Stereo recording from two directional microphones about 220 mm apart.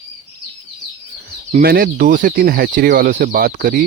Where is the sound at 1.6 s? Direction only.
45° right (ahead or behind).